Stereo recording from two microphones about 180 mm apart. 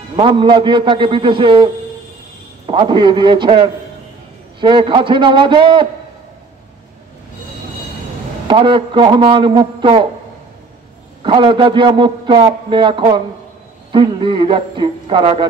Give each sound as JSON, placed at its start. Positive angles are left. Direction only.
{"t": 0.1, "sound": "a man's voice", "side_deg": -30}
{"t": 8.5, "sound": "a man's voice", "side_deg": -30}
{"t": 11.2, "sound": "a man's voice", "side_deg": -25}